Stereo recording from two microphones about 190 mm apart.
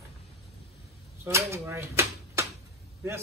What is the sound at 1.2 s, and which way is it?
A man's voice, 15° right (ahead or behind).